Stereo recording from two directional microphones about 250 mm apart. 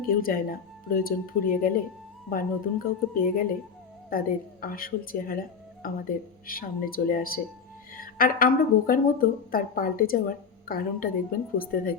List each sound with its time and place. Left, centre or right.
0.0 s speech: left
4.6 s speech: left